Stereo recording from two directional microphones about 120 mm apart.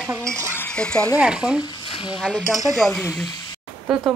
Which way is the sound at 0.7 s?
10° left (ahead or behind).